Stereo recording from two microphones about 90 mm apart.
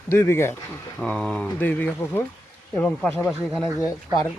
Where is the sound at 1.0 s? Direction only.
15° left (ahead or behind).